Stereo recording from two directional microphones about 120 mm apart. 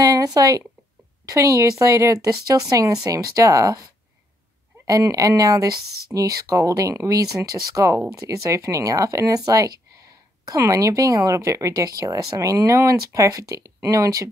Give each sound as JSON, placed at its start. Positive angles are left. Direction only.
{"t": 0.0, "sound": "speech", "side_deg": -30}
{"t": 4.8, "sound": "speech", "side_deg": -30}